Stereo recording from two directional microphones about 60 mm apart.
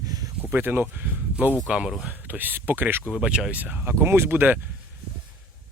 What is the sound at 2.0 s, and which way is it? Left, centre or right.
Speech, right.